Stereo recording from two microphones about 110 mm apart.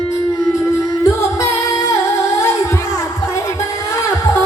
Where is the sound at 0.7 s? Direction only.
30° left (ahead or behind).